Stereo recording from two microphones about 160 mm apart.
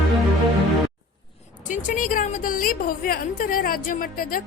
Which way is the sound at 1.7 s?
55° left (ahead or behind).